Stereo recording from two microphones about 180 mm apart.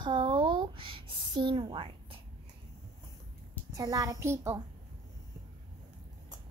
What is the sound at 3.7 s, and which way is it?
Speech, 20° right (ahead or behind).